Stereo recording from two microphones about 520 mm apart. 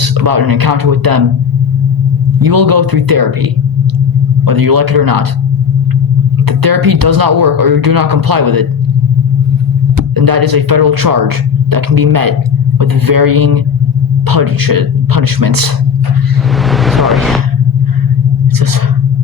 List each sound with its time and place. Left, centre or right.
0.0 s speech: right
2.4 s speech: right
4.4 s speech: right
6.5 s speech: right
10.2 s speech: right
16.6 s vehicle: centre